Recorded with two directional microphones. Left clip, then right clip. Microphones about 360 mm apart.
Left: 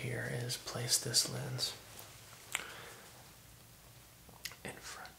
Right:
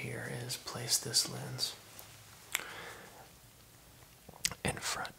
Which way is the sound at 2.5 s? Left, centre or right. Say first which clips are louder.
Right 3 dB; centre.